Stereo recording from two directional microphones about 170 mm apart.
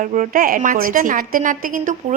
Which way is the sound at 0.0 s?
50° right (ahead or behind).